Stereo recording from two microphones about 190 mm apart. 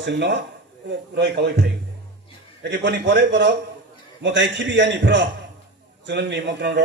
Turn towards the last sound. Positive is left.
turn(degrees=-70)  # may be behind; listen again after turning